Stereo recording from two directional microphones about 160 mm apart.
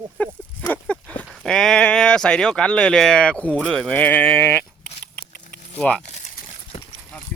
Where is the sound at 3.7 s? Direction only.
5° left (ahead or behind).